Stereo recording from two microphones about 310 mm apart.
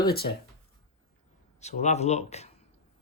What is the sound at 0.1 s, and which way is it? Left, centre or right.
Speech, left.